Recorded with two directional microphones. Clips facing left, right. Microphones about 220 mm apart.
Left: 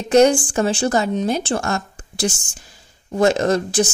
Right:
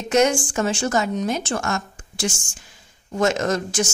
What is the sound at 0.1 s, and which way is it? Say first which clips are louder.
A woman's voice: left 5 dB; 35° left (ahead or behind).